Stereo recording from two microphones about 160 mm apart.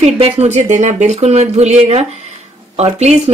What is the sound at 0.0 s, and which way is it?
A woman's voice, 40° right (ahead or behind).